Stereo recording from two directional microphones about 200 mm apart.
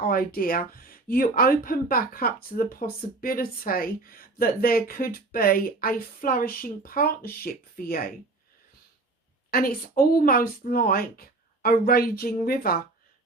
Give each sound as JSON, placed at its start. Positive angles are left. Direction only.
{"t": 0.0, "sound": "speech", "side_deg": 50}
{"t": 9.5, "sound": "speech", "side_deg": 50}